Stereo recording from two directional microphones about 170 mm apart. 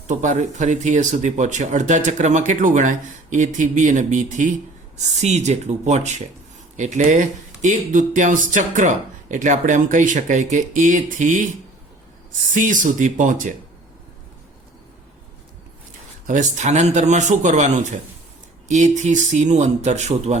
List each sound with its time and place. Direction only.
0.1 s speech: 45° right (ahead or behind)
12.5 s speech: 50° right (ahead or behind)
16.2 s speech: 45° right (ahead or behind)